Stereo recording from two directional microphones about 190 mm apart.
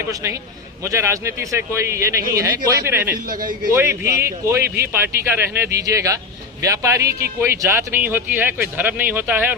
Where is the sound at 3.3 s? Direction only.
45° right (ahead or behind).